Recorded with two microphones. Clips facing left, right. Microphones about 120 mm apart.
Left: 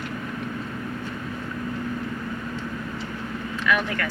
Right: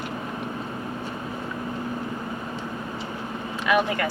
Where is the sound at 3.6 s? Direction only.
20° right (ahead or behind).